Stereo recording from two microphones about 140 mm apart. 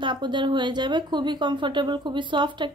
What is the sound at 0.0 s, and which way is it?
A woman's voice, 35° right (ahead or behind).